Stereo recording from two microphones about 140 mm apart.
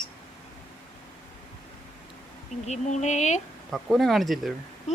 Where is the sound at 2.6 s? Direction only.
55° left (ahead or behind).